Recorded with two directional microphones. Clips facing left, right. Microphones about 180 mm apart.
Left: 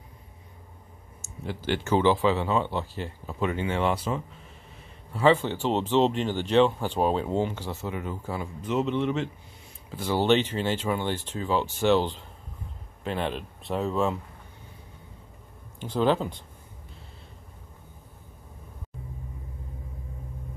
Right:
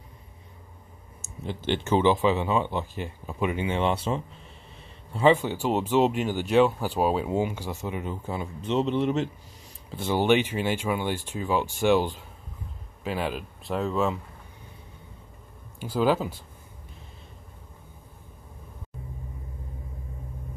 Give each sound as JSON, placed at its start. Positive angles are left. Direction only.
{"t": 1.2, "sound": "speech", "side_deg": -20}
{"t": 5.1, "sound": "speech", "side_deg": -15}
{"t": 9.8, "sound": "speech", "side_deg": -25}
{"t": 10.2, "sound": "speech", "side_deg": -10}
{"t": 15.8, "sound": "speech", "side_deg": -5}